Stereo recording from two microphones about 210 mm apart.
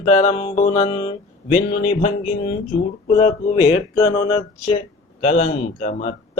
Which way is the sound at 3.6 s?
35° left (ahead or behind).